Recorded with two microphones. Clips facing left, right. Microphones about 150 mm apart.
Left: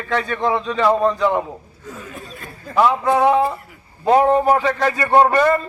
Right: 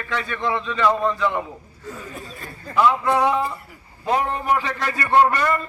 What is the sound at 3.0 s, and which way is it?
A man's voice, 45° left (ahead or behind).